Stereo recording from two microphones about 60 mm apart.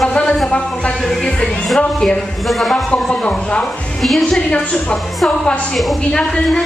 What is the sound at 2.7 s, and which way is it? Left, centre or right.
Speech, centre.